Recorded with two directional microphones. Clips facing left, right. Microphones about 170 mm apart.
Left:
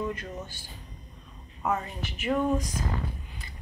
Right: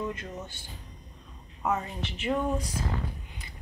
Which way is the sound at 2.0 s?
30° right (ahead or behind).